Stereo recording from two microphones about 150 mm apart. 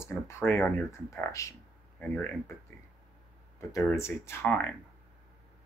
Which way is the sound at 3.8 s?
15° left (ahead or behind).